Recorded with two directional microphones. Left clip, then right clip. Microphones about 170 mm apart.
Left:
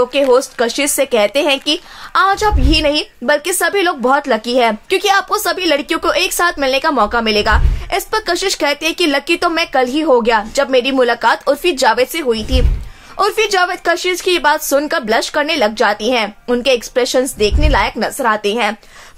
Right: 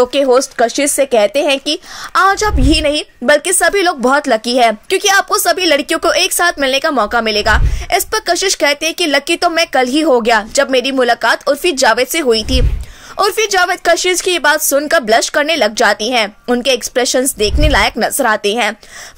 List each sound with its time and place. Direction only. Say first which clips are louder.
0.0 s a woman's voice: right 1 dB; 35° right (ahead or behind); by 1.6 s 20° right (ahead or behind)
1.7 s a woman's voice: even; 30° right (ahead or behind)